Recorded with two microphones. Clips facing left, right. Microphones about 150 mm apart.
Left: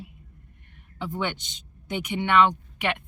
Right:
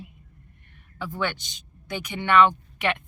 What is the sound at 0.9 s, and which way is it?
Speech, 20° left (ahead or behind).